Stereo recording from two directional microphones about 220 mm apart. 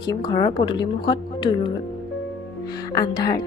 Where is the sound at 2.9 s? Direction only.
15° left (ahead or behind).